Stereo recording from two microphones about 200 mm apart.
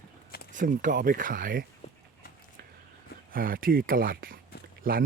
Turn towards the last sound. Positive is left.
turn(degrees=-45)  # may be behind; listen again after turning